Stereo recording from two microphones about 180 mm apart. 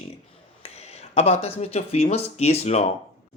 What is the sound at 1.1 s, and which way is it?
Speech, 35° left (ahead or behind).